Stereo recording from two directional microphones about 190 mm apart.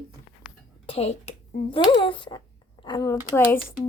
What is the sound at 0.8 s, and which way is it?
Speech, 30° left (ahead or behind).